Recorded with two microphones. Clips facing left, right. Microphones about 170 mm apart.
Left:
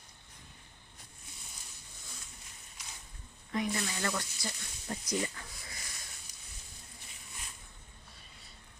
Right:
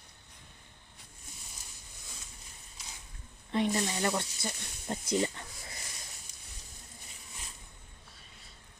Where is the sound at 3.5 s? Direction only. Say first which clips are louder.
Right 4 dB; 30° right (ahead or behind).